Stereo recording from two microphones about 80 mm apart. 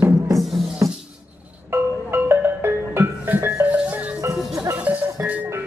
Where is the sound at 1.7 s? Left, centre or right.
Right.